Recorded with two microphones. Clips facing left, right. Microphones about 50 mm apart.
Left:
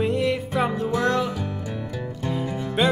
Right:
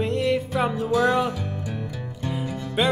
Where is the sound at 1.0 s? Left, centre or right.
Centre.